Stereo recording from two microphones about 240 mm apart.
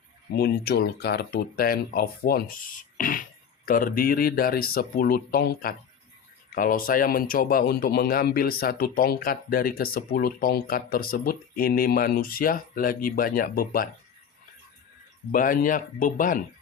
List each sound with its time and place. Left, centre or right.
0.3 s a man's voice: left
15.3 s a man's voice: left